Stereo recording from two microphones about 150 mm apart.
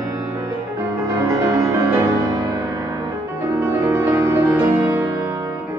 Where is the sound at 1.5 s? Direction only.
20° right (ahead or behind).